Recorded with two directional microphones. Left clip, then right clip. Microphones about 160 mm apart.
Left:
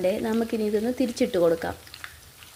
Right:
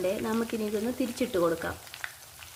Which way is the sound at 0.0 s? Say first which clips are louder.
Left 5 dB; 25° left (ahead or behind).